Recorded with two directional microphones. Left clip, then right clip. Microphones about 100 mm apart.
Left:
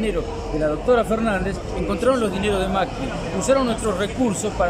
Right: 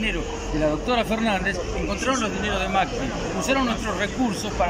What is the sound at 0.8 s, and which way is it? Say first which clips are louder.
Speech: left 4 dB; 20° left (ahead or behind).